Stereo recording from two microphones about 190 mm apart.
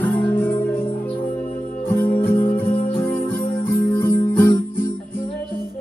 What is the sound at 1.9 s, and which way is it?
Music, 10° left (ahead or behind).